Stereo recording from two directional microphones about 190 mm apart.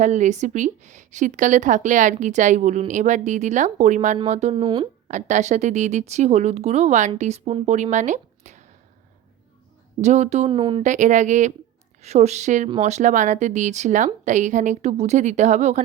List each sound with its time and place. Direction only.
0.0 s a woman's voice: 40° right (ahead or behind)
5.0 s a woman's voice: 40° right (ahead or behind)
10.0 s a woman's voice: 35° right (ahead or behind)
10.8 s a woman's voice: 40° right (ahead or behind)